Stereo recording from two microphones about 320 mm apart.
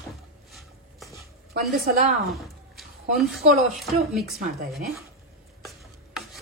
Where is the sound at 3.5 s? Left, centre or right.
Centre.